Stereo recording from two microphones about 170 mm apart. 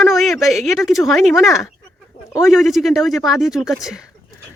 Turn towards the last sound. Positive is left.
turn(degrees=0)  # may be behind; listen again after turning